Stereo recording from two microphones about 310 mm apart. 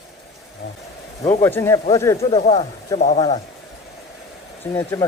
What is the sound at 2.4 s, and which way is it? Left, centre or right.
Speech, left.